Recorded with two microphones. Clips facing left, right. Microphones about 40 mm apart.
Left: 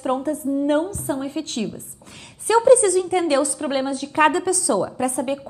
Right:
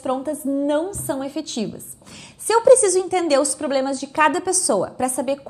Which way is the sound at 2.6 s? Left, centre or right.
Left.